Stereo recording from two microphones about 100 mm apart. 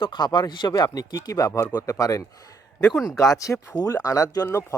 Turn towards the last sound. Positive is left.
turn(degrees=30)  # may be behind; listen again after turning